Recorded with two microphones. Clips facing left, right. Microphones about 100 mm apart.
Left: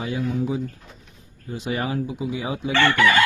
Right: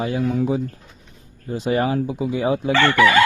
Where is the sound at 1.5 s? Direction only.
40° right (ahead or behind).